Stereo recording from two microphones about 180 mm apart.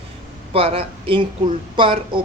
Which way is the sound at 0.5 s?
30° right (ahead or behind).